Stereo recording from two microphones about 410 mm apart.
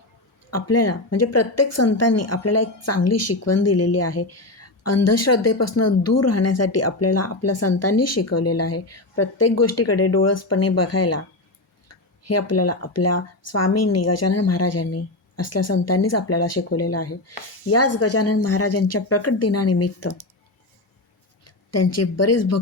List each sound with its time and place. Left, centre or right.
0.5 s speech: left
12.3 s speech: left
21.4 s speech: left